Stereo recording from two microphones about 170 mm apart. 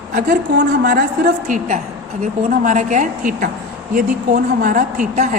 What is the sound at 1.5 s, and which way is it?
A woman's voice, 45° right (ahead or behind).